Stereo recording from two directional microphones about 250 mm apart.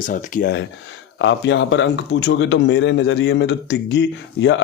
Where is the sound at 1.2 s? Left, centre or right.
Left.